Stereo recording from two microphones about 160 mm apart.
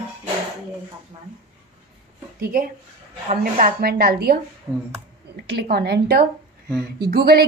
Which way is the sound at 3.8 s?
75° right (ahead or behind).